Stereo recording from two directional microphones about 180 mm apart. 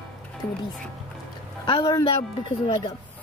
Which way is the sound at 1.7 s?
20° left (ahead or behind).